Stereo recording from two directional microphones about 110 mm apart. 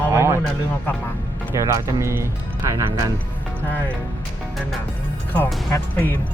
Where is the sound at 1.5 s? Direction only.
25° right (ahead or behind).